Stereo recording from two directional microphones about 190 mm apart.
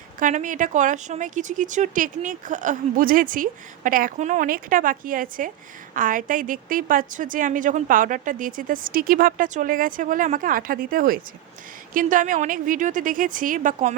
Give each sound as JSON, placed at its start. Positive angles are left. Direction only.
{"t": 0.2, "sound": "speech", "side_deg": -45}